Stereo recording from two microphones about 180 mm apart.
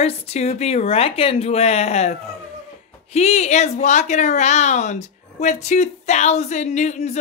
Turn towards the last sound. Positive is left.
turn(degrees=40)  # may be behind; listen again after turning